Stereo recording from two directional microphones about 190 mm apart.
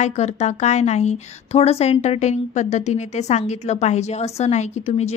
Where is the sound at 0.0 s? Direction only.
35° left (ahead or behind).